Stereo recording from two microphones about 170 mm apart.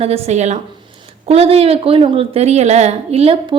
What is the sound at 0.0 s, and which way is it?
A woman's voice, 35° right (ahead or behind).